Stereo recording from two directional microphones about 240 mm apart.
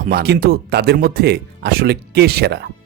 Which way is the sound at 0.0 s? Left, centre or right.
Right.